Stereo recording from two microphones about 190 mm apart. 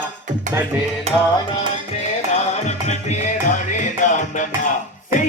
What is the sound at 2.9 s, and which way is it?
Music, 40° left (ahead or behind).